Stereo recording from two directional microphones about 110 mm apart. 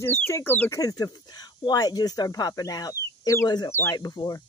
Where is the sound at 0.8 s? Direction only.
35° left (ahead or behind).